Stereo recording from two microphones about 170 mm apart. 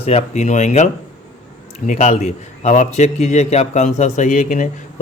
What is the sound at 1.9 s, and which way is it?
A man's voice, 45° left (ahead or behind).